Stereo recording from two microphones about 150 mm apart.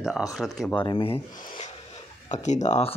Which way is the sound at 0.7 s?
30° left (ahead or behind).